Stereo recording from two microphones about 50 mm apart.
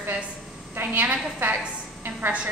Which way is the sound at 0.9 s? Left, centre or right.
Right.